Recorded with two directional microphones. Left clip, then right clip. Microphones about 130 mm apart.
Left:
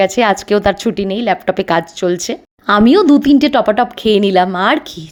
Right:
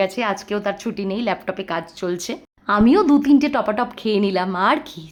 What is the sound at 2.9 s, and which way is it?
A woman's voice, 30° left (ahead or behind).